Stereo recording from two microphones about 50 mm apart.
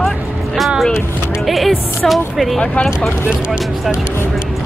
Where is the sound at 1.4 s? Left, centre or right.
Centre.